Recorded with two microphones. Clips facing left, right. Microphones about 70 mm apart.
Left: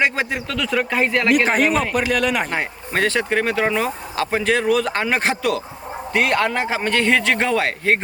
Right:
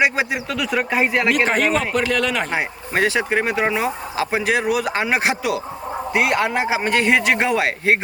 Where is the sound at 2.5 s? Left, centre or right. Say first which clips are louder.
Right 1 dB; centre.